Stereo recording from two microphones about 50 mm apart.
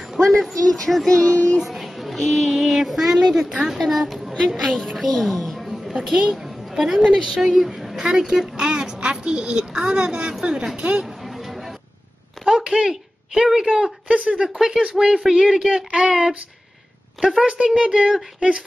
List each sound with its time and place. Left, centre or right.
0.3 s a woman's voice: centre
1.2 s speech: left
1.6 s a woman's voice: centre
5.2 s music: centre
6.0 s a woman's voice: centre
10.8 s speech: right
12.4 s a woman's voice: centre
17.2 s a woman's voice: centre
17.8 s speech: right